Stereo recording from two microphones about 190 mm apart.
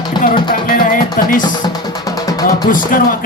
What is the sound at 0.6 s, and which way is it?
Music, 45° left (ahead or behind).